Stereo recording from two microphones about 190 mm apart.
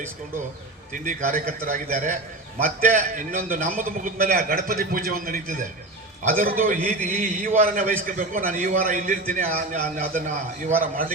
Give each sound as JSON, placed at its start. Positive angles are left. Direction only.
{"t": 0.9, "sound": "a man's voice", "side_deg": -45}